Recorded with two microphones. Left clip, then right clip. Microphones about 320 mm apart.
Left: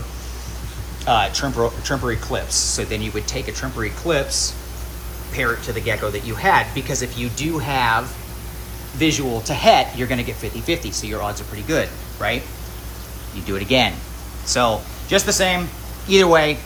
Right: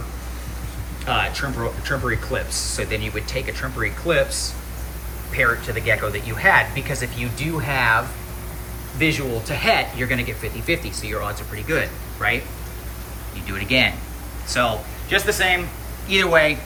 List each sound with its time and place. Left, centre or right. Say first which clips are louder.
1.1 s speech: left 4 dB; centre
11.5 s speech: left 1 dB; centre
13.5 s speech: left 1 dB; centre